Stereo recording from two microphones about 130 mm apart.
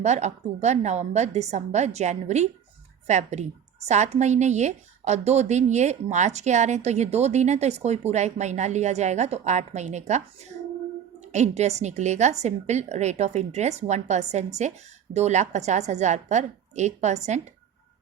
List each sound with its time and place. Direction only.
0.0 s a woman's voice: 60° right (ahead or behind)